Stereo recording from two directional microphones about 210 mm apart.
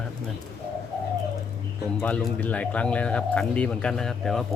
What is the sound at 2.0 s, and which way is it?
Speech, 5° left (ahead or behind).